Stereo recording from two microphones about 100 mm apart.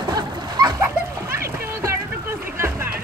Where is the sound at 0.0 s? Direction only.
45° right (ahead or behind).